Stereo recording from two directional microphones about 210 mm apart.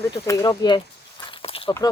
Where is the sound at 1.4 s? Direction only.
25° left (ahead or behind).